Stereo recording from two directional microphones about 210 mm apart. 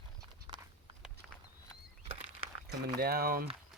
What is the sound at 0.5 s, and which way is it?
Walk, 20° right (ahead or behind).